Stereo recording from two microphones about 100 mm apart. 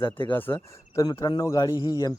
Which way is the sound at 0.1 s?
20° left (ahead or behind).